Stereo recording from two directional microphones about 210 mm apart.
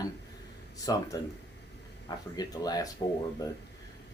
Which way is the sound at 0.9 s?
20° left (ahead or behind).